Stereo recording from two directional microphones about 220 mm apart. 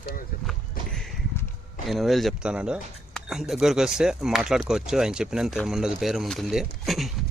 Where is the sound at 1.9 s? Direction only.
Centre (ahead or behind).